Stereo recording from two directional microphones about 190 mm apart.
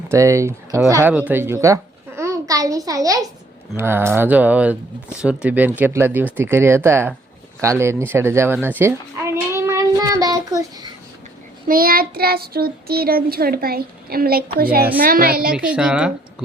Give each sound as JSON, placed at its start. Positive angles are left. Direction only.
{"t": 0.1, "sound": "a child's voice", "side_deg": -15}
{"t": 8.5, "sound": "child singing", "side_deg": -10}
{"t": 11.7, "sound": "child singing", "side_deg": -50}
{"t": 15.5, "sound": "a woman's voice", "side_deg": -5}